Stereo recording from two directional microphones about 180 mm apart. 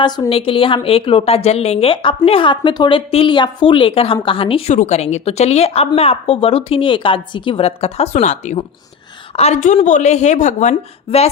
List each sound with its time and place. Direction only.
0.0 s a woman's voice: 25° left (ahead or behind); by 11.3 s 40° left (ahead or behind)